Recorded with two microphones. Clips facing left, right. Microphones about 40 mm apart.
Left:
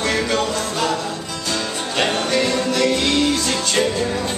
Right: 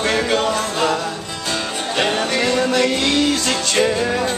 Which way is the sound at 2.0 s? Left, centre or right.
Centre.